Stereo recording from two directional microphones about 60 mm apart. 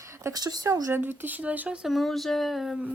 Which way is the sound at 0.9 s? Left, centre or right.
Right.